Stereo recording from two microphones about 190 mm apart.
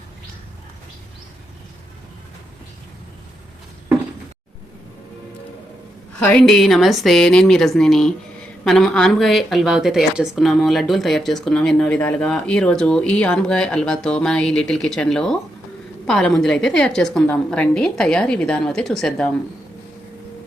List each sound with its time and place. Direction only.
6.1 s speech: 5° left (ahead or behind)